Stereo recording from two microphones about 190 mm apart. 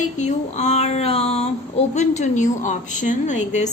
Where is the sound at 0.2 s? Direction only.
40° left (ahead or behind).